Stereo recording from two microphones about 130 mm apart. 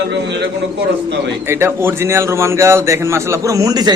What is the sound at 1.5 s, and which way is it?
A man's voice, 20° right (ahead or behind).